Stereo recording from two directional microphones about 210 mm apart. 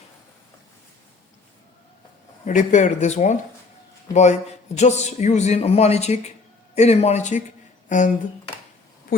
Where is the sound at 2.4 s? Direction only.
35° left (ahead or behind).